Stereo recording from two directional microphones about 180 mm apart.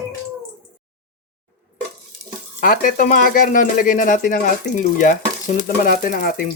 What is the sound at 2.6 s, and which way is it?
Speech, 50° left (ahead or behind).